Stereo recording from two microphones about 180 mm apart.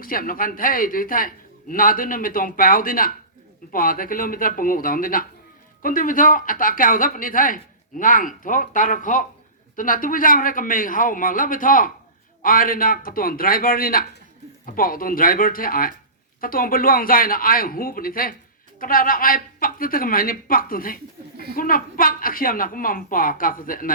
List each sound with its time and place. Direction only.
0.0 s speech: 50° left (ahead or behind)